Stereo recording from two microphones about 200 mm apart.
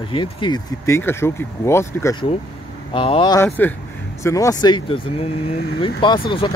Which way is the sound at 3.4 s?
10° left (ahead or behind).